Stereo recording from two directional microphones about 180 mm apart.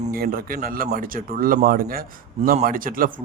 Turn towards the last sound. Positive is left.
turn(degrees=-50)  # may be behind; listen again after turning